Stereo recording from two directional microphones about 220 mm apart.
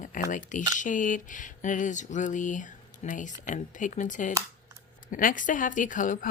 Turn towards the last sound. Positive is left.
turn(degrees=35)  # may be behind; listen again after turning